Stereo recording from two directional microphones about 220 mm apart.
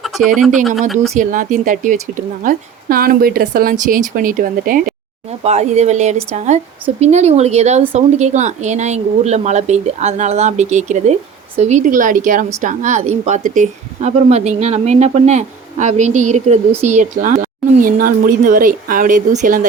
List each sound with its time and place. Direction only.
0.0 s speech: centre (ahead or behind)
1.1 s speech: 35° right (ahead or behind)
5.4 s speech: 30° right (ahead or behind)